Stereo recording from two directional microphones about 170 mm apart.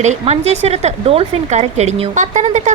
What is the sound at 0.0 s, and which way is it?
A woman's voice, 40° right (ahead or behind).